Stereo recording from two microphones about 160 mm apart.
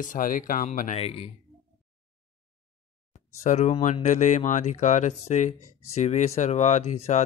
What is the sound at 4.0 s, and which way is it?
Speech, 50° left (ahead or behind).